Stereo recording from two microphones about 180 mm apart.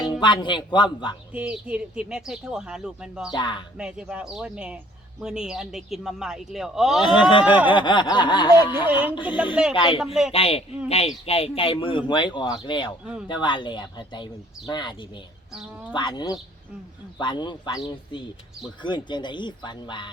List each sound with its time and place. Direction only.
0.0 s speech: 25° left (ahead or behind)
1.3 s speech: 10° right (ahead or behind)
3.3 s speech: 25° left (ahead or behind)
3.8 s speech: 5° right (ahead or behind)
7.0 s speech: 25° left (ahead or behind)
7.4 s speech: 10° right (ahead or behind)
7.7 s speech: 25° left (ahead or behind)
8.4 s speech: 10° right (ahead or behind)
9.7 s speech: 30° left (ahead or behind)
18.8 s speech: 25° left (ahead or behind)